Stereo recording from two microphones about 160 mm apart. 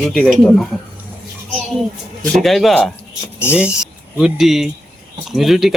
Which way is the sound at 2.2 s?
Centre (ahead or behind).